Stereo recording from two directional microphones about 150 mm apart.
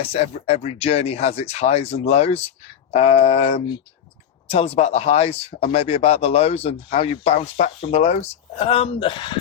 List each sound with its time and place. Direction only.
0.0 s speech: 40° left (ahead or behind)